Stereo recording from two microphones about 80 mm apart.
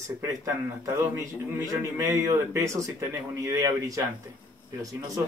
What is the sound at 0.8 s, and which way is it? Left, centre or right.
Speech, right.